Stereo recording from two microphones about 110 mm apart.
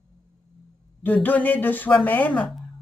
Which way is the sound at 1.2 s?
15° left (ahead or behind).